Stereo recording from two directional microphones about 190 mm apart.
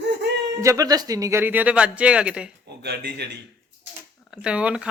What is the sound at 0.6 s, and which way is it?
Speech, 20° right (ahead or behind).